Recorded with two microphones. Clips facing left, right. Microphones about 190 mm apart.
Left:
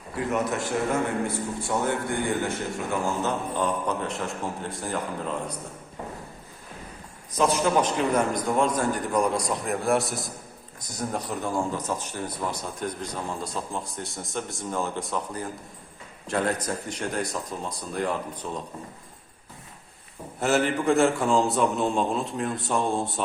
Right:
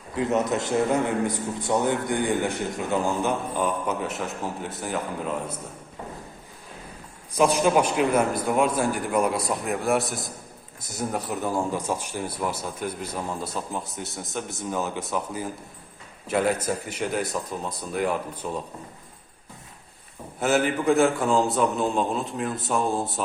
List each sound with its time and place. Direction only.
0.2 s a man's voice: 20° right (ahead or behind)
7.3 s a man's voice: 15° right (ahead or behind)
20.4 s speech: centre (ahead or behind)